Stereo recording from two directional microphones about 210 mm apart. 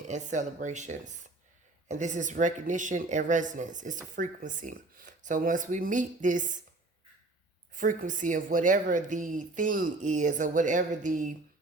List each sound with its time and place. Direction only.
0.1 s speech: 35° right (ahead or behind)
7.7 s speech: 40° right (ahead or behind)